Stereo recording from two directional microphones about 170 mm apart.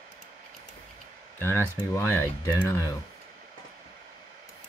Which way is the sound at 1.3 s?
15° left (ahead or behind).